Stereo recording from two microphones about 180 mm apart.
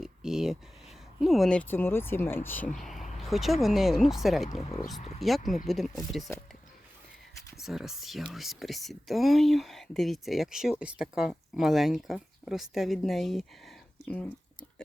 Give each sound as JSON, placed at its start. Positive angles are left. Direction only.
{"t": 0.0, "sound": "a sound", "side_deg": 0}
{"t": 1.2, "sound": "speech", "side_deg": 0}
{"t": 4.4, "sound": "speech", "side_deg": 35}
{"t": 5.2, "sound": "speech", "side_deg": 0}
{"t": 7.5, "sound": "speech", "side_deg": 0}